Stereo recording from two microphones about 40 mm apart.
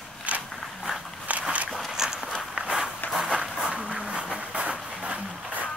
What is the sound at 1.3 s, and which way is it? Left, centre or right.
Walk, right.